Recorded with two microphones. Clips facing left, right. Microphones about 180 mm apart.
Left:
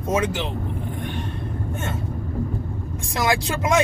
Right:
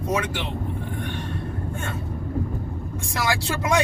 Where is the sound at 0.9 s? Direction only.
20° left (ahead or behind).